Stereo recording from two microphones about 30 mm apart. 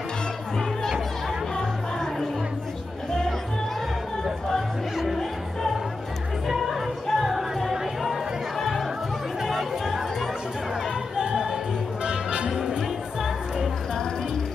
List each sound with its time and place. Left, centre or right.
1.6 s a sound: centre
4.9 s music: centre
6.7 s music: centre
8.5 s music: centre
9.5 s chatter: centre
11.1 s music: right
12.4 s music: centre